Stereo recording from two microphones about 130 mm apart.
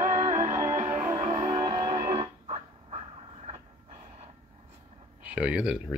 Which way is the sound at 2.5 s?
50° right (ahead or behind).